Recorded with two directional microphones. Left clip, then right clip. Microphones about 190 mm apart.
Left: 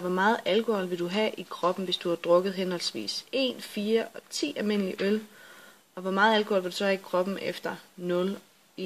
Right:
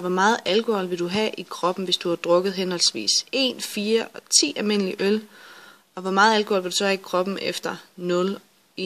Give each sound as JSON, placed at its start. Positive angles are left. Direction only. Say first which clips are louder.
{"t": 0.0, "sound": "speech", "louder": "right 5 dB", "side_deg": -25}